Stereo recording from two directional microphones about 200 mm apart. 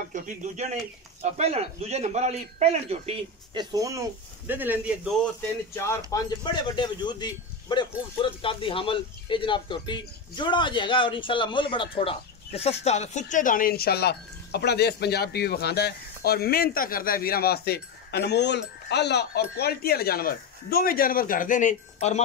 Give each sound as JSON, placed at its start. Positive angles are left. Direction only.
{"t": 0.1, "sound": "speech", "side_deg": -40}
{"t": 3.7, "sound": "speech", "side_deg": -15}
{"t": 5.8, "sound": "speech", "side_deg": 15}